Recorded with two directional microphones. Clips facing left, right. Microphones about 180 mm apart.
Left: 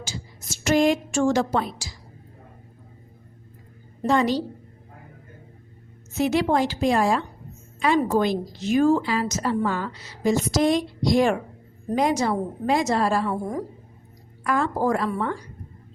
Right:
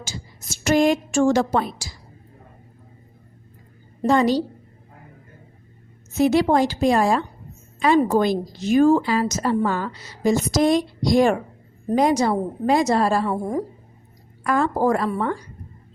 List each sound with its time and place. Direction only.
0.6 s a woman's voice: 45° right (ahead or behind)
4.0 s a woman's voice: 35° right (ahead or behind)
6.1 s a woman's voice: 40° right (ahead or behind)
8.2 s a woman's voice: 40° right (ahead or behind)